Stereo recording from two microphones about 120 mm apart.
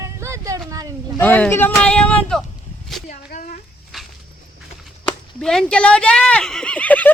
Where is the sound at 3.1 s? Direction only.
90° left.